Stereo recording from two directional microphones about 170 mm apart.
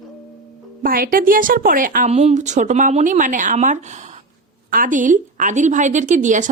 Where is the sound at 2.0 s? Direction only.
40° right (ahead or behind).